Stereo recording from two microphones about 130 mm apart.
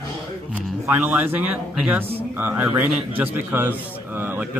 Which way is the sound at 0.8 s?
15° right (ahead or behind).